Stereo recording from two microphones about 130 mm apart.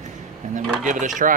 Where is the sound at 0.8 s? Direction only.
75° right (ahead or behind).